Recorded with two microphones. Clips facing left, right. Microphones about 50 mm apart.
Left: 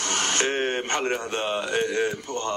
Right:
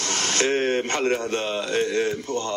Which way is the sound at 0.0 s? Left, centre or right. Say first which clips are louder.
Right 1 dB; left.